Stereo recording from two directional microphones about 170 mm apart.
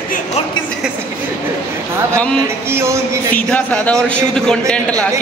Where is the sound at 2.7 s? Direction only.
15° right (ahead or behind).